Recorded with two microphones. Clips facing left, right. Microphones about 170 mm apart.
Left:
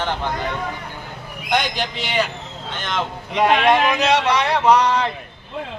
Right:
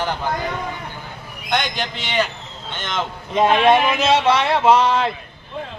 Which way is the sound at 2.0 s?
5° left (ahead or behind).